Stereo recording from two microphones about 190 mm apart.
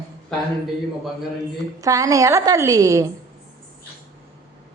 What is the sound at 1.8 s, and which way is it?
A woman's voice, 15° right (ahead or behind).